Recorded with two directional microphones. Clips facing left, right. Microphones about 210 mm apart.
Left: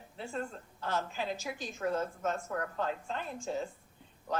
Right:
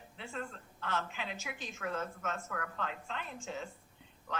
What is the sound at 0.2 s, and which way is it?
A woman's voice, 40° left (ahead or behind).